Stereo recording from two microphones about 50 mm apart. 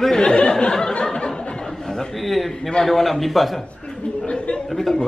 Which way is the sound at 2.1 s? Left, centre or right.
Centre.